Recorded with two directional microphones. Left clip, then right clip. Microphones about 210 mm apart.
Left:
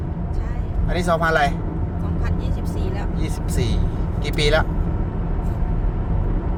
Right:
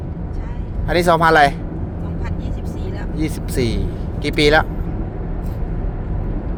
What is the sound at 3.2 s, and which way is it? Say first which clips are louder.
Speech: right 11 dB; 35° right (ahead or behind).